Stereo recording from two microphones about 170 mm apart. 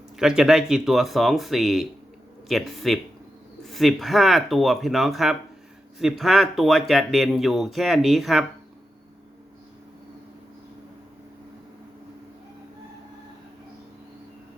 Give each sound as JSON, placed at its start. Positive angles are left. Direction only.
{"t": 0.2, "sound": "speech", "side_deg": -5}